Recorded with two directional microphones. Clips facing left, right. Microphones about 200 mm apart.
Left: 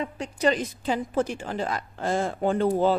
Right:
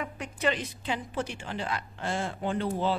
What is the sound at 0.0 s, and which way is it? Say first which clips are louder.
A woman's voice: left 5 dB; 35° left (ahead or behind).